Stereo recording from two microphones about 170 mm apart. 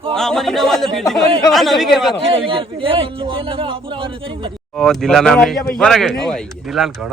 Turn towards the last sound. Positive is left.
turn(degrees=0)  # may be behind; listen again after turning